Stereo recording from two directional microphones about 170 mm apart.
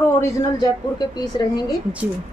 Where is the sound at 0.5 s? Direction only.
25° left (ahead or behind).